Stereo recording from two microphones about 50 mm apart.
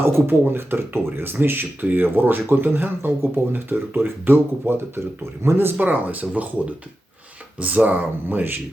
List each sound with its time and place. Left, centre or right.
0.0 s speech: right
5.8 s speech: right